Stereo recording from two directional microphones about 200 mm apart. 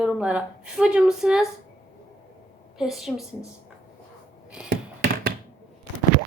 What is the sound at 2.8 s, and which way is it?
Speech, centre (ahead or behind).